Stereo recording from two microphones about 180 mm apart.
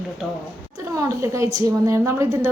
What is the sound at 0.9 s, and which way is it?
A woman's voice, 15° right (ahead or behind).